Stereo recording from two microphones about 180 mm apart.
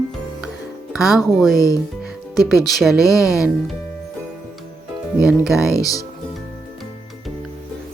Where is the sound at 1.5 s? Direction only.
20° left (ahead or behind).